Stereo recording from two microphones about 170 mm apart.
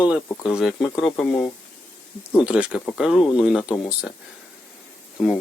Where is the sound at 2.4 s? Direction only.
5° right (ahead or behind).